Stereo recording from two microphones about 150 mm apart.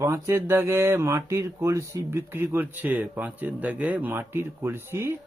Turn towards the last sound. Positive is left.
turn(degrees=-15)  # may be behind; listen again after turning